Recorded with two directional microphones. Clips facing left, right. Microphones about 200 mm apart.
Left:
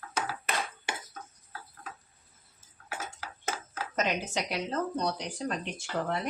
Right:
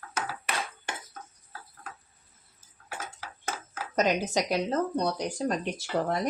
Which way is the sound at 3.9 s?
40° right (ahead or behind).